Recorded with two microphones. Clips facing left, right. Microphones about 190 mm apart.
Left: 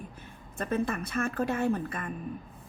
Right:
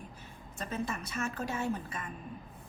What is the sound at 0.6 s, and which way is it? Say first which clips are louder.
A woman's voice: left 7 dB; 55° left (ahead or behind).